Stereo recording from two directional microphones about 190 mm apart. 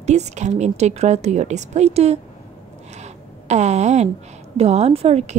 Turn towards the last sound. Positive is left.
turn(degrees=-35)  # may be behind; listen again after turning